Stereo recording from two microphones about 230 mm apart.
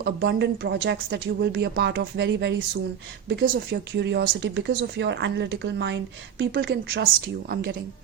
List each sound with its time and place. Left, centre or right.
0.0 s speech: right